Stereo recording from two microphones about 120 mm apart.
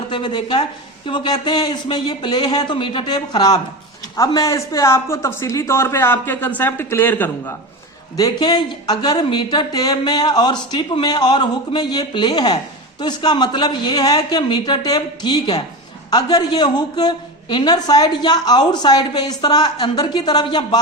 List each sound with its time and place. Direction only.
0.1 s a woman's voice: 40° left (ahead or behind); by 7.5 s 15° left (ahead or behind)
8.1 s a woman's voice: 35° left (ahead or behind)